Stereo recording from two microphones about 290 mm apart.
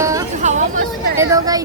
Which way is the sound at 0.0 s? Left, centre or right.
Centre.